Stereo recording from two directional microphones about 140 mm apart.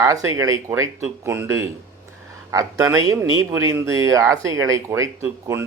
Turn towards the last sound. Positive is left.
turn(degrees=-20)  # may be behind; listen again after turning